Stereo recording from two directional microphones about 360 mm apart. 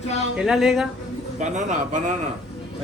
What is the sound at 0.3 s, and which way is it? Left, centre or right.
Speech, centre.